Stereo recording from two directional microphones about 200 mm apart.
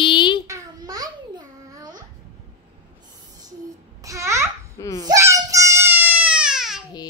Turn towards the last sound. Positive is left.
turn(degrees=-5)  # may be behind; listen again after turning